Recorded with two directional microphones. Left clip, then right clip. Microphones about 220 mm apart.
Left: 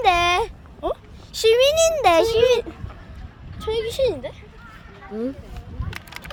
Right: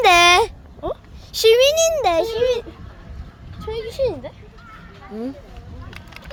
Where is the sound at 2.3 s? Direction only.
5° left (ahead or behind).